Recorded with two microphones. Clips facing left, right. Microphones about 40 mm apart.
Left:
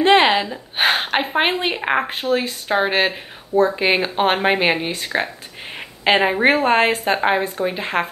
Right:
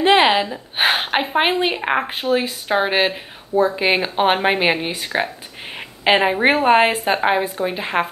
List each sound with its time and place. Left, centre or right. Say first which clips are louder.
0.0 s speech: even; centre